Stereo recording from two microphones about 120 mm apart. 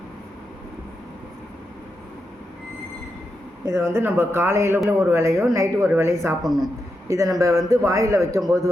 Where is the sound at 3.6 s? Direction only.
25° right (ahead or behind).